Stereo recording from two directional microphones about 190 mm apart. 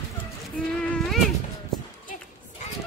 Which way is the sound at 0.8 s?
5° left (ahead or behind).